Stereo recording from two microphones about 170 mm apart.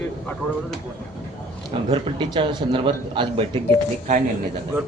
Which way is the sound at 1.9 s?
25° right (ahead or behind).